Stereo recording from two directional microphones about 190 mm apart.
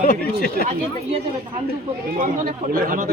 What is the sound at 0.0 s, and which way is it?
Speech, 50° left (ahead or behind).